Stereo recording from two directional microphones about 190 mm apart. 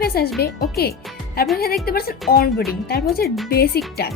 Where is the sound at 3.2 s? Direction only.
Centre (ahead or behind).